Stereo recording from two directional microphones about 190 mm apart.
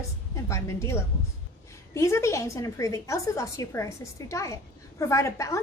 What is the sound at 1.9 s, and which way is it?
A woman's voice, 15° left (ahead or behind).